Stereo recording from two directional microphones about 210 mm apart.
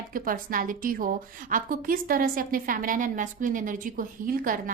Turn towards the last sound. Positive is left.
turn(degrees=-40)  # may be behind; listen again after turning